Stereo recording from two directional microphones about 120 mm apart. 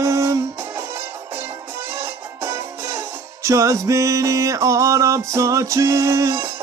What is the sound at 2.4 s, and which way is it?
Music, 25° right (ahead or behind).